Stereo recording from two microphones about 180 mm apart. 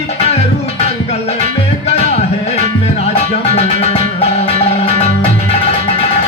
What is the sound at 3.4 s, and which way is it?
Music, 35° left (ahead or behind).